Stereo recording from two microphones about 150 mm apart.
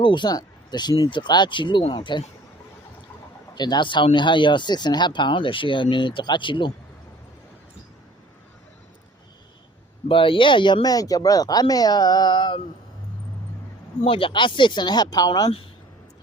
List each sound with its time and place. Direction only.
0.0 s speech: 30° left (ahead or behind)
3.5 s speech: 30° left (ahead or behind)
10.1 s speech: 35° left (ahead or behind)
14.0 s speech: 35° left (ahead or behind)